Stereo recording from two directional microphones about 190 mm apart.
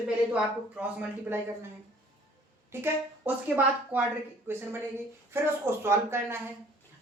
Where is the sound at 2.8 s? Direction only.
10° right (ahead or behind).